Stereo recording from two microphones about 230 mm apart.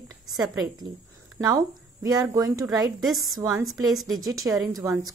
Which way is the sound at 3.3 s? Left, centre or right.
Centre.